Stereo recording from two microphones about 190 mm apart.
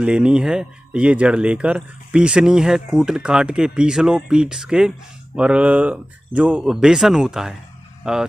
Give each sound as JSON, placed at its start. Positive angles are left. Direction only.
{"t": 0.0, "sound": "speech", "side_deg": -5}